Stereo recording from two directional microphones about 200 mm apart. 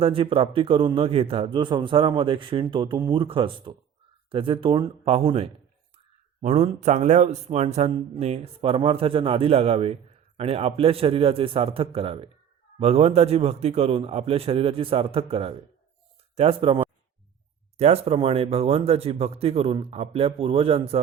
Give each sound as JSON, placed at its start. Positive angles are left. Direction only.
{"t": 0.0, "sound": "a man's voice", "side_deg": -25}